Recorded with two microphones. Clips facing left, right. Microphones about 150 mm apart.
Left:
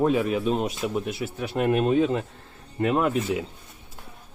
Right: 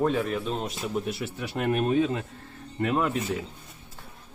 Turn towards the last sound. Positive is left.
turn(degrees=10)  # may be behind; listen again after turning